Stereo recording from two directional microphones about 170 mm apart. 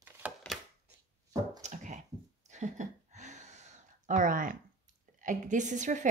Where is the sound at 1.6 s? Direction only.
45° right (ahead or behind).